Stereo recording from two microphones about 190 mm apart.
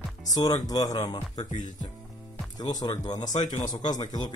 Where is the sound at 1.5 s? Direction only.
40° left (ahead or behind).